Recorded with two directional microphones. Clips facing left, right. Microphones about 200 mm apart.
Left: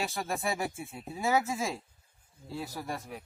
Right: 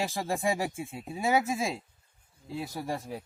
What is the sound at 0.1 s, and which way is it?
Speech, 20° right (ahead or behind).